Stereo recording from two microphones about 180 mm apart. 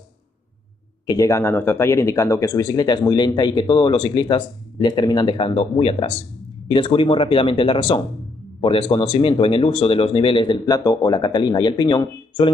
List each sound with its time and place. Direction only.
1.0 s speech: 20° left (ahead or behind)